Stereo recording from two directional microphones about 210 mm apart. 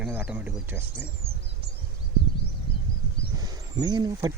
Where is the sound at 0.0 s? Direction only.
5° right (ahead or behind).